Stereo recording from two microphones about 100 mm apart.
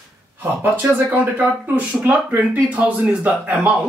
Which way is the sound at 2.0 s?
15° right (ahead or behind).